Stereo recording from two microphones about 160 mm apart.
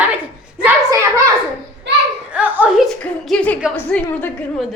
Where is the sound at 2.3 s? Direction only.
10° right (ahead or behind).